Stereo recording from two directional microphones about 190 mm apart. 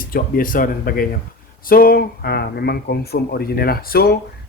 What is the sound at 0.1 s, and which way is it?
Speech, 45° left (ahead or behind).